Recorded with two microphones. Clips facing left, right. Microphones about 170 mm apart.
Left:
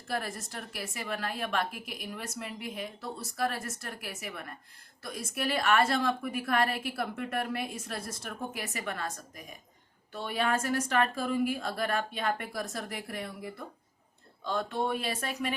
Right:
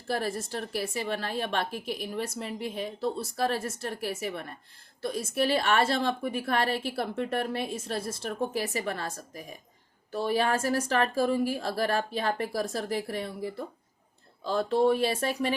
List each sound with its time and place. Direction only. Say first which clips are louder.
0.1 s a woman's voice: right 5 dB; 30° right (ahead or behind)